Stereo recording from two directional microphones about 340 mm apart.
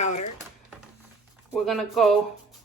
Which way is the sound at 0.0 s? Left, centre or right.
Centre.